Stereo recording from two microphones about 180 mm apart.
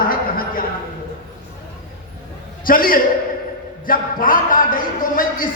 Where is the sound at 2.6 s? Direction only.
50° left (ahead or behind).